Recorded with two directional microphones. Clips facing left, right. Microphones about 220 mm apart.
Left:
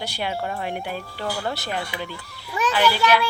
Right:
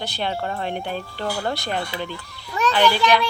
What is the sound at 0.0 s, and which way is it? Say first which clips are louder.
Speech: right 1 dB; 10° left (ahead or behind).